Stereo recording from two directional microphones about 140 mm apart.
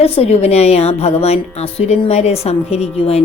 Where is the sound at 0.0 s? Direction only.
45° left (ahead or behind).